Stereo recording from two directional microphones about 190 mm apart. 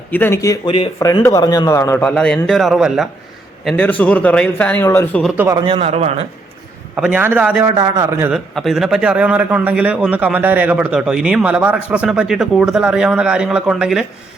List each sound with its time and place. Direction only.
0.1 s speech: 10° left (ahead or behind)
2.1 s a man's voice: 5° left (ahead or behind)
5.4 s a man's voice: 15° right (ahead or behind)
5.6 s a man's voice: 30° right (ahead or behind)
6.9 s a man's voice: 5° right (ahead or behind)
7.8 s a man's voice: 15° right (ahead or behind)
8.3 s a man's voice: centre (ahead or behind)